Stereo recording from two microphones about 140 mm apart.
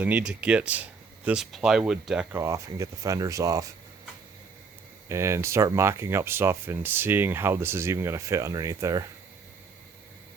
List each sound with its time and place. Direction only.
0.0 s speech: 10° right (ahead or behind)
2.3 s speech: 20° right (ahead or behind)
5.0 s speech: 20° right (ahead or behind)